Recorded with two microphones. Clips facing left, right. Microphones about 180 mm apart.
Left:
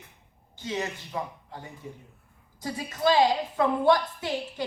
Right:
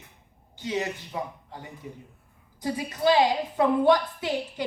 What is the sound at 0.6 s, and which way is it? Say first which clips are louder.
Speech: right 2 dB; 20° right (ahead or behind).